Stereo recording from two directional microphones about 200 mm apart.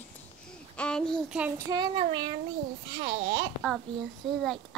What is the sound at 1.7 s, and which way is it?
Child singing, 20° right (ahead or behind).